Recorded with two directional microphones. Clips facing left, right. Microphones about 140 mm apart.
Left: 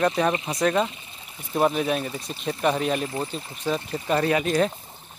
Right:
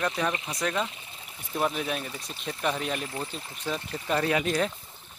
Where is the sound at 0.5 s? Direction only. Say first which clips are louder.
Left 7 dB; 45° left (ahead or behind).